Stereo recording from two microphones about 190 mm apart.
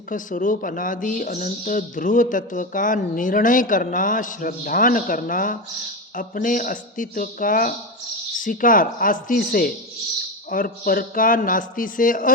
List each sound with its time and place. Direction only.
0.1 s a woman's voice: 45° left (ahead or behind)